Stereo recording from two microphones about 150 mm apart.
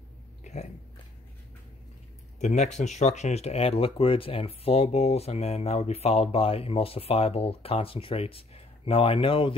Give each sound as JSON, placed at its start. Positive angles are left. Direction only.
{"t": 0.4, "sound": "biting", "side_deg": 50}
{"t": 2.3, "sound": "speech", "side_deg": 50}